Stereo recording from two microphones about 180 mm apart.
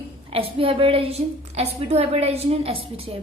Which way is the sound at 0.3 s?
30° right (ahead or behind).